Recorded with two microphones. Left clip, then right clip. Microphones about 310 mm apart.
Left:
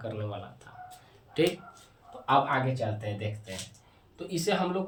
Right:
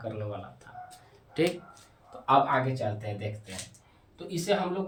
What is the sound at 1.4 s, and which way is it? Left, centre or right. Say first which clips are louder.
Speech: left 1 dB; centre.